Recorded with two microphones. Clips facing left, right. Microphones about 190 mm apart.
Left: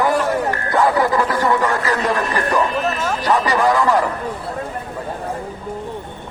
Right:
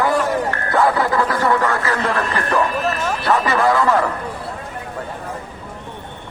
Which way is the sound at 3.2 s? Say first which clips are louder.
Even; 15° left (ahead or behind).